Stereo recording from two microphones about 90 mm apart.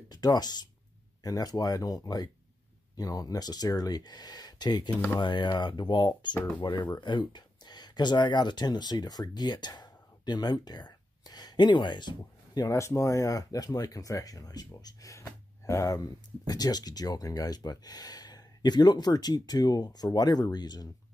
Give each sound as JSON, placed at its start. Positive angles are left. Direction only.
{"t": 0.1, "sound": "speech", "side_deg": 50}
{"t": 4.9, "sound": "speech", "side_deg": 20}
{"t": 5.2, "sound": "speech", "side_deg": 60}
{"t": 12.5, "sound": "speech", "side_deg": 35}